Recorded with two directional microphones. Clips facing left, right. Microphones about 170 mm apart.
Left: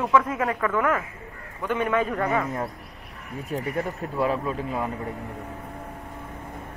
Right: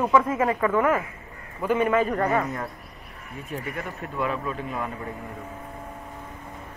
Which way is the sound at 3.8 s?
35° left (ahead or behind).